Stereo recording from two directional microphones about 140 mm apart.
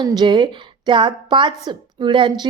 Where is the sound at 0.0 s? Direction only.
30° right (ahead or behind).